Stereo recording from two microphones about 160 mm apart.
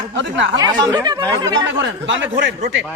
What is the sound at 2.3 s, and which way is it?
Speech, 90° right.